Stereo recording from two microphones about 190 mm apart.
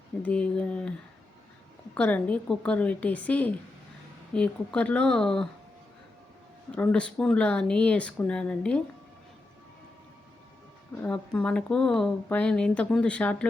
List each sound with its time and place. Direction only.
0.2 s speech: 5° left (ahead or behind)
2.0 s a woman's voice: 5° left (ahead or behind)
6.7 s speech: 5° left (ahead or behind)
11.0 s speech: 5° left (ahead or behind)